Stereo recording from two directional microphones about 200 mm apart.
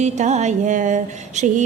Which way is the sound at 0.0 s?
35° right (ahead or behind).